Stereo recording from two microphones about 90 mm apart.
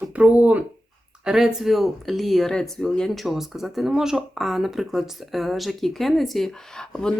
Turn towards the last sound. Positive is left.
turn(degrees=10)  # may be behind; listen again after turning